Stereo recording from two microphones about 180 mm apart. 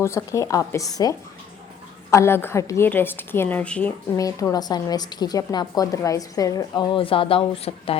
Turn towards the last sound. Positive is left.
turn(degrees=30)  # may be behind; listen again after turning